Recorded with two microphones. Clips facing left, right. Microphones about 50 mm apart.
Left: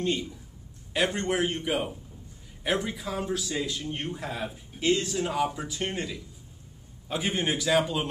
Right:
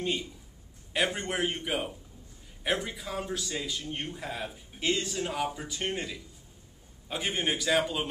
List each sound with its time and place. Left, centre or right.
0.0 s a man's voice: centre